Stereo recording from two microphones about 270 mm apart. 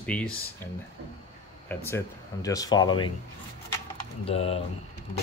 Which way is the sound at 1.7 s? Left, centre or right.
Centre.